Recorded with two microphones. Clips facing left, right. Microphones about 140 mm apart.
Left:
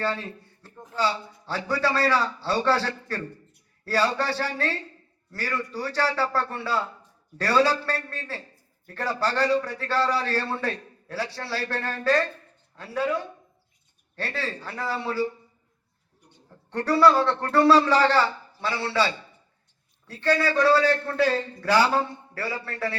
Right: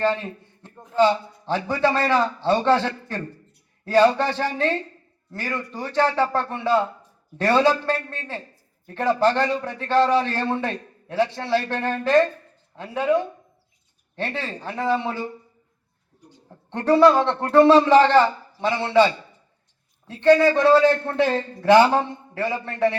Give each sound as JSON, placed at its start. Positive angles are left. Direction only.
{"t": 0.0, "sound": "a man's voice", "side_deg": -15}
{"t": 14.2, "sound": "a man's voice", "side_deg": -20}
{"t": 16.6, "sound": "a man's voice", "side_deg": -20}